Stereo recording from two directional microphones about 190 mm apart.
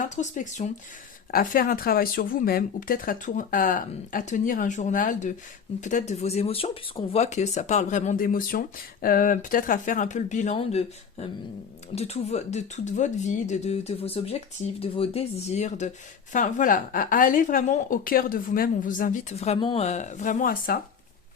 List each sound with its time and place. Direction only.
0.0 s a woman's voice: 40° left (ahead or behind)